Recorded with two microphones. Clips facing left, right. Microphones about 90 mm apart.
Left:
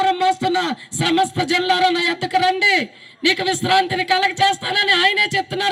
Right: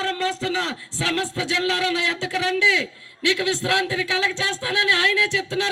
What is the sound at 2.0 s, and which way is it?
Speech, 10° left (ahead or behind).